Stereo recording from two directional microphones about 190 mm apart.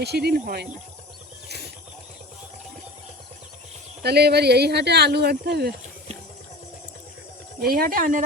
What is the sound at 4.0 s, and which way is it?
Speech, 60° right (ahead or behind).